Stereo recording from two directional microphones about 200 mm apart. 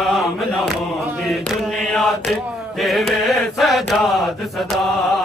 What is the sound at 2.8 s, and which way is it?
Mantra, centre (ahead or behind).